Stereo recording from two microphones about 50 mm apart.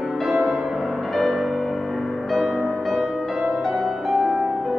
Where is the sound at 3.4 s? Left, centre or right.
Right.